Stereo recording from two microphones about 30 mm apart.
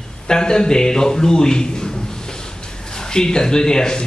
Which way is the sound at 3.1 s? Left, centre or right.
Left.